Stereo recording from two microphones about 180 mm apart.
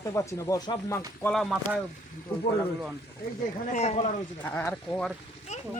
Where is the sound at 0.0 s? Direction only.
15° left (ahead or behind).